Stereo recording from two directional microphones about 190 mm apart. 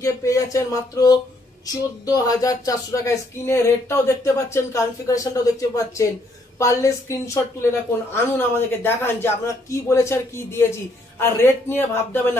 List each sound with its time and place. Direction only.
0.0 s a woman's voice: 15° left (ahead or behind)